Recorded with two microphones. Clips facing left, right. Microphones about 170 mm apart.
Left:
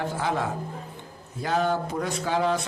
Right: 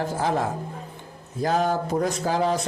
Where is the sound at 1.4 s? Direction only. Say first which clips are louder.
Right 2 dB; 40° right (ahead or behind).